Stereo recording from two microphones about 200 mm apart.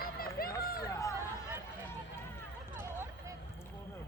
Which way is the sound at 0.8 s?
15° left (ahead or behind).